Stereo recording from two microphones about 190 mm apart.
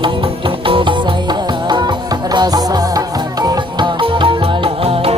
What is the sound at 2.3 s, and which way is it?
Music, 20° right (ahead or behind).